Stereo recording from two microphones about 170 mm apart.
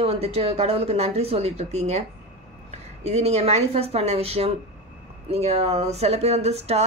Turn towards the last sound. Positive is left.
turn(degrees=-40)  # may be behind; listen again after turning